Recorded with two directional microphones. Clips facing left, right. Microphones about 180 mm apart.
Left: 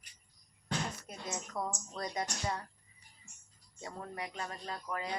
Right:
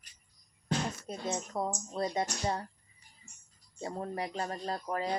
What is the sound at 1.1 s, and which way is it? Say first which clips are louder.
Speech: right 6 dB; 30° right (ahead or behind).